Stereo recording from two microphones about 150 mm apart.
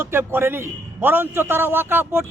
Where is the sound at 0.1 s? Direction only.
15° right (ahead or behind).